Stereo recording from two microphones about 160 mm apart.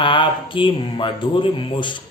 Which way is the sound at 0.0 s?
30° left (ahead or behind).